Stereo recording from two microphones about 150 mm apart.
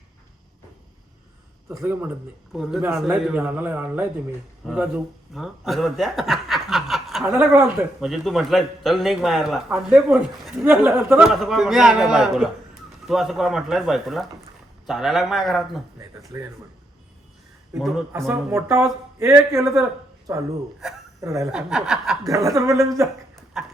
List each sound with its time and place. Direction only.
1.8 s a man's voice: 15° right (ahead or behind)
16.0 s speech: 20° right (ahead or behind)
17.7 s a man's voice: centre (ahead or behind)
18.3 s a woman's voice: 15° right (ahead or behind)
21.5 s a man's voice: 5° right (ahead or behind)
22.5 s speech: 20° right (ahead or behind)
23.6 s clip-clop: 5° right (ahead or behind)